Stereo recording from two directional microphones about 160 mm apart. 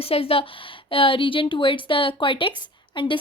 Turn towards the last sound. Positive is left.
turn(degrees=30)  # may be behind; listen again after turning